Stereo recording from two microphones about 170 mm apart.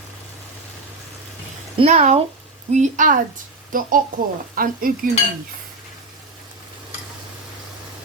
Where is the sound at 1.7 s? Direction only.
40° right (ahead or behind).